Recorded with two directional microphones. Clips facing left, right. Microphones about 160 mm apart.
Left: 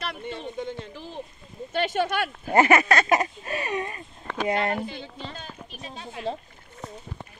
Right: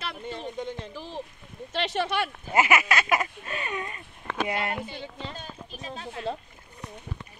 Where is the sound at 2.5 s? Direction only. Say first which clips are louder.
Left 4 dB; 50° left (ahead or behind).